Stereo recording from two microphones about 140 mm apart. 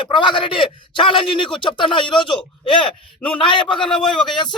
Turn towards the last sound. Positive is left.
turn(degrees=5)  # may be behind; listen again after turning